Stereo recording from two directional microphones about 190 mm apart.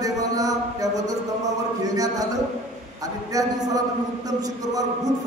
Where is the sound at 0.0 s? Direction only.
20° right (ahead or behind).